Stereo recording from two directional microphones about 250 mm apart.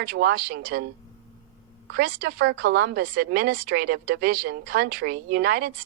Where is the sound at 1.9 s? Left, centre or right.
Right.